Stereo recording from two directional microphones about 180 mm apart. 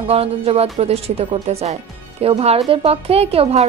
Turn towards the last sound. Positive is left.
turn(degrees=-35)  # may be behind; listen again after turning